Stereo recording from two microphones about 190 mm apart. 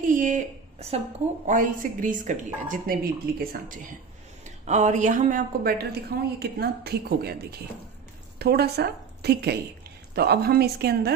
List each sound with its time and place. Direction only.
0.0 s a woman's voice: 45° right (ahead or behind)